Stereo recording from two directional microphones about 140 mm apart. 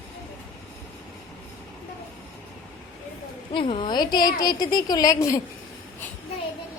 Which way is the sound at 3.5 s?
40° left (ahead or behind).